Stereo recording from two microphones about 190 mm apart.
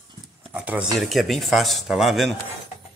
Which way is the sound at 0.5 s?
5° right (ahead or behind).